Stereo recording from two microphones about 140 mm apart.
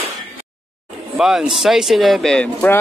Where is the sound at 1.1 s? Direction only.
5° right (ahead or behind).